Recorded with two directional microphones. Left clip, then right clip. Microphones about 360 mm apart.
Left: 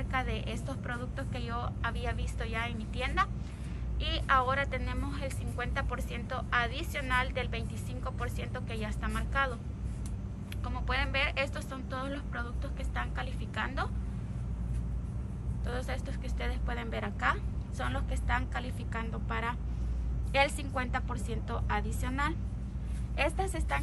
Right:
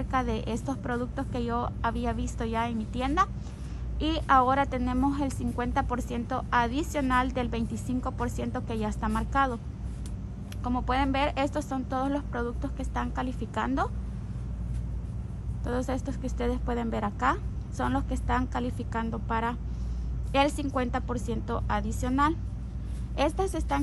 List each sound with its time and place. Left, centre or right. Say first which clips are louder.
0.1 s a woman's voice: right 5 dB; centre
10.6 s a woman's voice: right 7 dB; centre
15.6 s a woman's voice: right 7 dB; centre